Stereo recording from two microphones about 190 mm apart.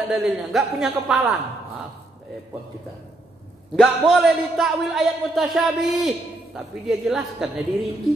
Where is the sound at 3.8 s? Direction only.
Centre (ahead or behind).